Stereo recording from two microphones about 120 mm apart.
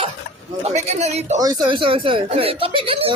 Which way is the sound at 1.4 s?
35° right (ahead or behind).